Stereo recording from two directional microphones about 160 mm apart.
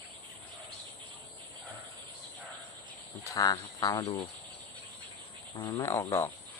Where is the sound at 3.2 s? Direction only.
20° left (ahead or behind).